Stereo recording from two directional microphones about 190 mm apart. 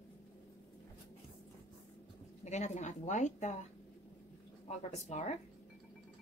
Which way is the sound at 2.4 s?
35° left (ahead or behind).